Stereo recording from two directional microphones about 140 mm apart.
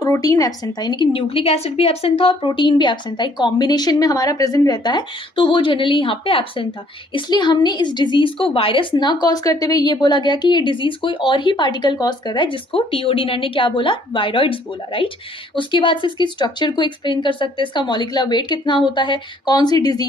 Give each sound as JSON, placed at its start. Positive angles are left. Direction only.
{"t": 0.0, "sound": "a woman's voice", "side_deg": 25}